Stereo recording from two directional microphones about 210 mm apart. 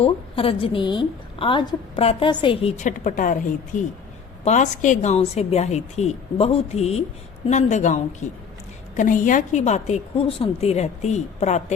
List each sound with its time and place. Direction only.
0.0 s a woman's voice: 25° left (ahead or behind)